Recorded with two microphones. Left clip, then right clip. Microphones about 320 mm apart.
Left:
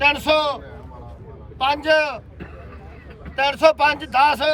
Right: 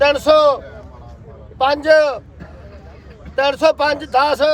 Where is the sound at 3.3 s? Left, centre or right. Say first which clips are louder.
Right 2 dB; centre.